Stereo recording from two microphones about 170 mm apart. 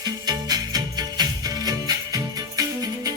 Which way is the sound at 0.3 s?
25° right (ahead or behind).